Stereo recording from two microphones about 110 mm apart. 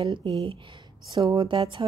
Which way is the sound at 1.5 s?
45° right (ahead or behind).